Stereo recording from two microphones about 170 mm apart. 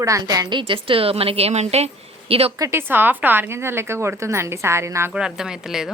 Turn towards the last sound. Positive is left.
turn(degrees=-5)  # may be behind; listen again after turning